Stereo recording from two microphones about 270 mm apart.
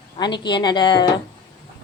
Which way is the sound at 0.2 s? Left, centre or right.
Centre.